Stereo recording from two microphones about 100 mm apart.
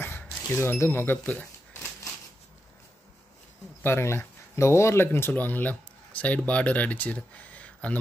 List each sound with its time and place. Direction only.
0.0 s speech: 20° left (ahead or behind)
3.8 s speech: 25° left (ahead or behind)